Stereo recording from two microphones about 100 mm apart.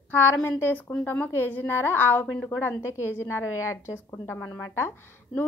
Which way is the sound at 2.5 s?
25° left (ahead or behind).